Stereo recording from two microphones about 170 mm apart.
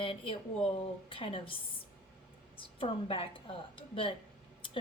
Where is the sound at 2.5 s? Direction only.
30° left (ahead or behind).